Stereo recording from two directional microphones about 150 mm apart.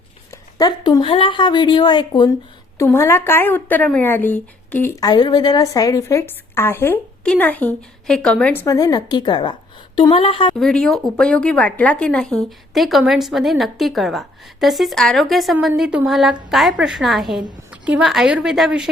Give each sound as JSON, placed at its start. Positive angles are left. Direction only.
{"t": 0.3, "sound": "a sound", "side_deg": 25}
{"t": 1.0, "sound": "speech", "side_deg": 35}
{"t": 2.7, "sound": "speech", "side_deg": 20}
{"t": 8.6, "sound": "a woman's voice", "side_deg": 25}
{"t": 10.5, "sound": "speech", "side_deg": 5}